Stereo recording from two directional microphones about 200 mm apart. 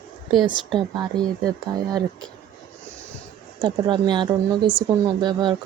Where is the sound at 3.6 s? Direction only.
20° right (ahead or behind).